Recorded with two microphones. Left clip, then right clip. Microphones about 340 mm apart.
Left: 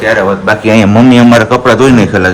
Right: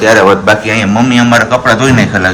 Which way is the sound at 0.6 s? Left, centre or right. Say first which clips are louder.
Left 4 dB; centre.